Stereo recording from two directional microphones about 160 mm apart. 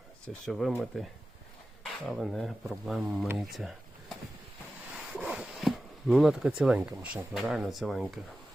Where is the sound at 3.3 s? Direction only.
Centre (ahead or behind).